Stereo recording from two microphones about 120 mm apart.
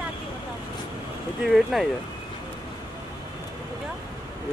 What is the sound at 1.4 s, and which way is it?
Speech, centre (ahead or behind).